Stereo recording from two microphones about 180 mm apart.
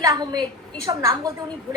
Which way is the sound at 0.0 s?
20° right (ahead or behind).